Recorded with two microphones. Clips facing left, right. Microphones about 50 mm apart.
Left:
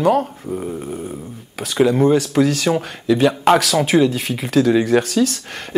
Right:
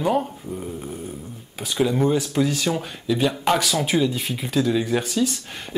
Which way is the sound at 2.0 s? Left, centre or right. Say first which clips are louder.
Left 6 dB; left.